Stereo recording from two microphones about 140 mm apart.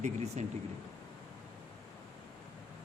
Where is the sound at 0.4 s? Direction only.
55° right (ahead or behind).